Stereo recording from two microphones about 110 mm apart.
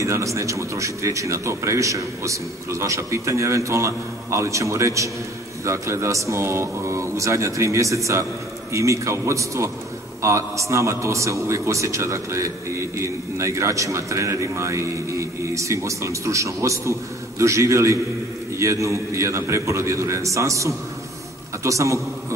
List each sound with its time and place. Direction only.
0.0 s a man's voice: 30° right (ahead or behind)